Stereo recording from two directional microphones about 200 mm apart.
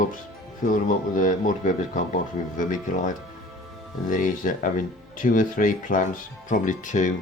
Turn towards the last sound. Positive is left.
turn(degrees=40)  # may be behind; listen again after turning